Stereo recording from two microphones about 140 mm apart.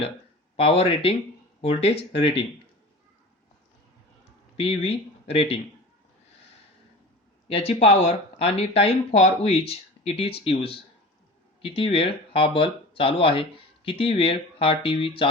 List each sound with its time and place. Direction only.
0.5 s speech: 45° left (ahead or behind)
4.5 s speech: 45° left (ahead or behind)
7.4 s speech: 45° left (ahead or behind)